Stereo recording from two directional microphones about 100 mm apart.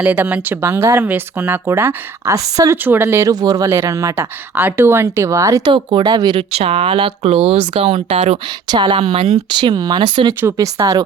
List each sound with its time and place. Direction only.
0.0 s speech: 15° right (ahead or behind)
2.3 s speech: 35° right (ahead or behind)
2.7 s speech: 20° right (ahead or behind)
3.3 s speech: 40° right (ahead or behind)
5.6 s speech: 50° right (ahead or behind)
6.5 s speech: 90° right
8.4 s speech: 45° right (ahead or behind); by 9.4 s 80° right
9.5 s speech: 50° right (ahead or behind)
10.4 s speech: 35° right (ahead or behind)